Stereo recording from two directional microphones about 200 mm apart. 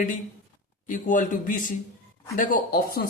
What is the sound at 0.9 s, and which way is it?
Speech, 40° left (ahead or behind).